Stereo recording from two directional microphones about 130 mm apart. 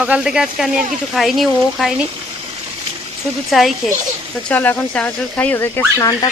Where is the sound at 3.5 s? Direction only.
Centre (ahead or behind).